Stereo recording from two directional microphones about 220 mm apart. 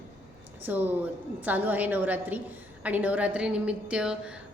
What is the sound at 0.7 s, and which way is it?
A woman's voice, 10° right (ahead or behind).